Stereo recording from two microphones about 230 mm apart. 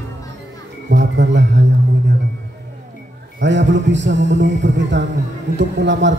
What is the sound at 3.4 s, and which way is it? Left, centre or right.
Speech, right.